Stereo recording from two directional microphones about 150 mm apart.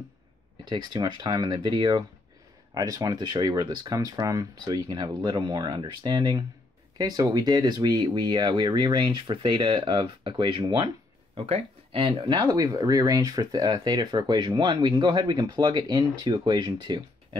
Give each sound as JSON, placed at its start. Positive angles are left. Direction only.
{"t": 0.7, "sound": "speech", "side_deg": -30}
{"t": 11.3, "sound": "speech", "side_deg": -40}
{"t": 12.2, "sound": "speech", "side_deg": -30}